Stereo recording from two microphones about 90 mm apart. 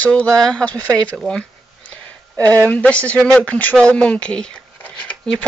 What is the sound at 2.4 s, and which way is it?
Speech, 40° right (ahead or behind).